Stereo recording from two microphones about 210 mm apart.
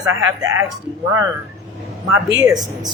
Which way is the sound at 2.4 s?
20° right (ahead or behind).